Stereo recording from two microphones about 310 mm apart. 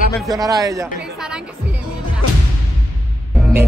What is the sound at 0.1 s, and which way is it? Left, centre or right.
Speech, centre.